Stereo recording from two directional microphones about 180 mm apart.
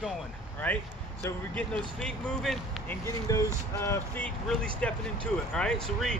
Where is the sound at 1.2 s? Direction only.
10° left (ahead or behind).